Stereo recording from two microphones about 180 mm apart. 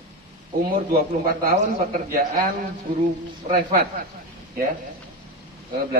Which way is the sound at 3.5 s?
45° right (ahead or behind).